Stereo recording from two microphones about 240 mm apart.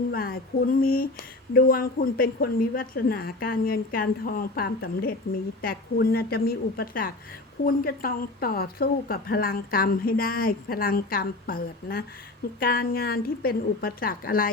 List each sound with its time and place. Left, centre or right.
0.1 s speech: left